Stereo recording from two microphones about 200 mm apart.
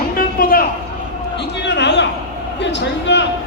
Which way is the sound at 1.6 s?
60° left (ahead or behind).